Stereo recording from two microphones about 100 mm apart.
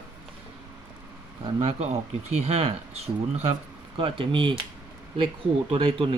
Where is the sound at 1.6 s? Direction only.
90° right.